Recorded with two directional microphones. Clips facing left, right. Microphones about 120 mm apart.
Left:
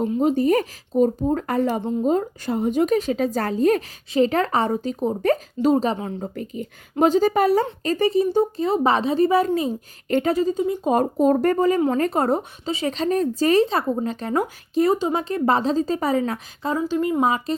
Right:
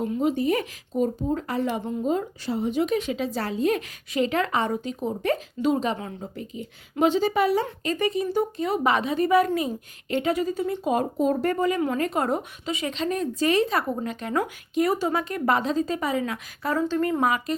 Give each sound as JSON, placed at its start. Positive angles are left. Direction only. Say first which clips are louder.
{"t": 0.2, "sound": "a woman's voice", "louder": "left 5 dB", "side_deg": 40}
{"t": 6.3, "sound": "a woman's voice", "louder": "left 5 dB", "side_deg": 50}
{"t": 6.9, "sound": "speech", "louder": "left 4 dB", "side_deg": 40}
{"t": 10.1, "sound": "a woman's voice", "louder": "left 4 dB", "side_deg": 45}
{"t": 10.3, "sound": "a woman's voice", "louder": "left 5 dB", "side_deg": 25}
{"t": 10.8, "sound": "a woman's voice", "louder": "left 5 dB", "side_deg": 45}
{"t": 11.5, "sound": "speech", "louder": "left 5 dB", "side_deg": 35}
{"t": 16.8, "sound": "a woman's voice", "louder": "left 3 dB", "side_deg": 15}